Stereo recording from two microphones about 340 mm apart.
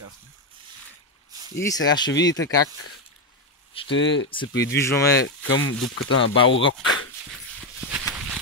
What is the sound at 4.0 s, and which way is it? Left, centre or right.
Speech, left.